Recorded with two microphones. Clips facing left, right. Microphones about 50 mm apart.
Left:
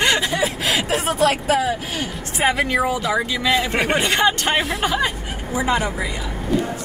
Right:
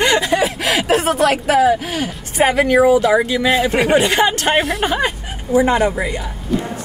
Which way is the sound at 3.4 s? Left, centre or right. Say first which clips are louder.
Right 4 dB; right.